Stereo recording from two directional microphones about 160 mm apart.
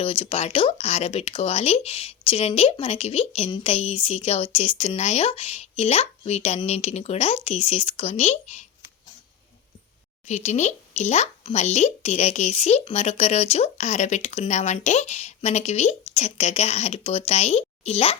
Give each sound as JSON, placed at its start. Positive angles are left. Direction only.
{"t": 0.0, "sound": "speech", "side_deg": 35}
{"t": 10.2, "sound": "speech", "side_deg": 45}